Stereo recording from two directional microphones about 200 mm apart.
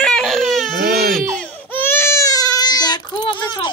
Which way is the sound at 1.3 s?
5° left (ahead or behind).